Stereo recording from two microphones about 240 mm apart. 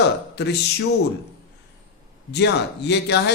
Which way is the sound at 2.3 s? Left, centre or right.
Left.